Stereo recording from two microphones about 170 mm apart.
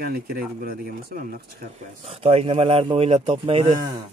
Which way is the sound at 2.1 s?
35° right (ahead or behind).